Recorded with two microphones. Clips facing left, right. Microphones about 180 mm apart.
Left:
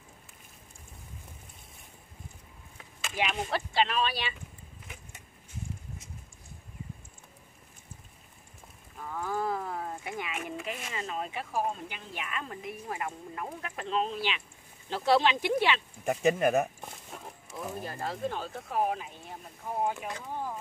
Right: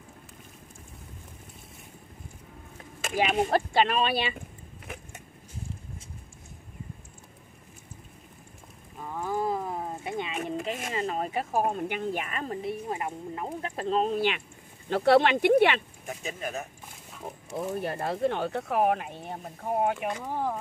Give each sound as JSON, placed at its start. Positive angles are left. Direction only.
{"t": 3.0, "sound": "speech", "side_deg": -50}
{"t": 9.1, "sound": "a sound", "side_deg": -20}
{"t": 10.4, "sound": "speech", "side_deg": -40}
{"t": 12.8, "sound": "speech", "side_deg": -25}
{"t": 16.1, "sound": "speech", "side_deg": 65}
{"t": 17.1, "sound": "a sound", "side_deg": 50}
{"t": 17.6, "sound": "speech", "side_deg": -65}